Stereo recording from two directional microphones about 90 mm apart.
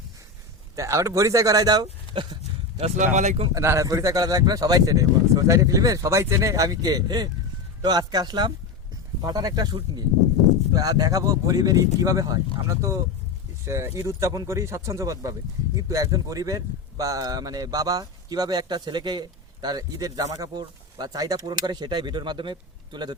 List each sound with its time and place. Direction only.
0.8 s speech: 35° right (ahead or behind); by 2.4 s 55° right (ahead or behind)
3.5 s speech: 35° right (ahead or behind); by 23.1 s 55° right (ahead or behind)